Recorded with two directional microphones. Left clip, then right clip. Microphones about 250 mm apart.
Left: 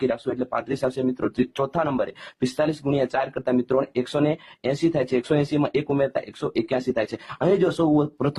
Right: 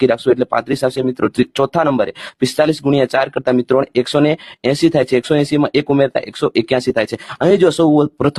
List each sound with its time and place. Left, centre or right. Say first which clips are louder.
0.1 s speech: right 12 dB; right